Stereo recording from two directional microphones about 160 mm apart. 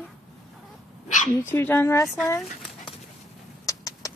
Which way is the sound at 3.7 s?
20° left (ahead or behind).